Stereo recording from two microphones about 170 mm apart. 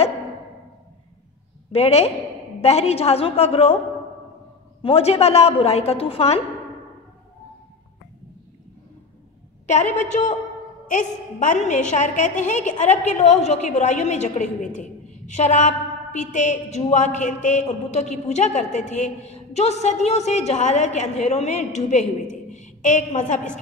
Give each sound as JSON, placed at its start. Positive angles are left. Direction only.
{"t": 1.7, "sound": "a woman's voice", "side_deg": 35}
{"t": 4.8, "sound": "a woman's voice", "side_deg": 35}
{"t": 9.7, "sound": "a woman's voice", "side_deg": 45}